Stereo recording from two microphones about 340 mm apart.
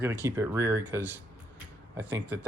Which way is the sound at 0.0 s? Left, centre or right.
Centre.